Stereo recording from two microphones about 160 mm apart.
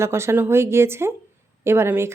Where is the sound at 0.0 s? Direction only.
15° right (ahead or behind).